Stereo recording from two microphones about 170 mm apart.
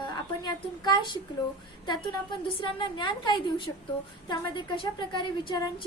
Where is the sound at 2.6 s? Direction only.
30° left (ahead or behind).